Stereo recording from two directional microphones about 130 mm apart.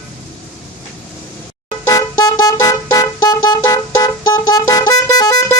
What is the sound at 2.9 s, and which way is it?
Vehicle horn, 25° left (ahead or behind).